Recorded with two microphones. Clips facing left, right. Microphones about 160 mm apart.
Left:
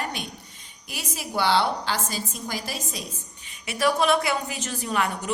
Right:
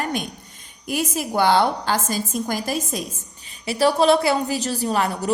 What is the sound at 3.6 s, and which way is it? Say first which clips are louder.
A woman's voice: right 5 dB; 30° right (ahead or behind).